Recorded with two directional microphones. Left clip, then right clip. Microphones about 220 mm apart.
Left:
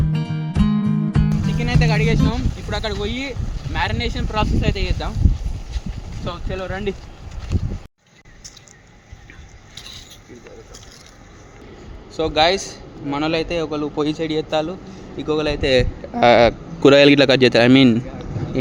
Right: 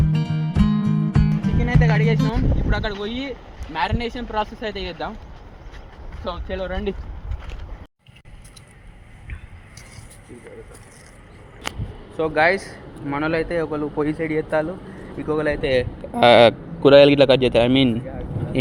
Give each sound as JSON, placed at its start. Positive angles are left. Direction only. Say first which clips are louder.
{"t": 0.1, "sound": "music", "louder": "even", "side_deg": 0}
{"t": 2.2, "sound": "speech", "louder": "even", "side_deg": 10}
{"t": 6.2, "sound": "speech", "louder": "even", "side_deg": 5}
{"t": 12.1, "sound": "a man's voice", "louder": "left 1 dB", "side_deg": 15}
{"t": 15.6, "sound": "speech", "louder": "left 6 dB", "side_deg": 40}
{"t": 16.1, "sound": "speech", "louder": "right 1 dB", "side_deg": 0}
{"t": 17.2, "sound": "a man's voice", "louder": "left 2 dB", "side_deg": 20}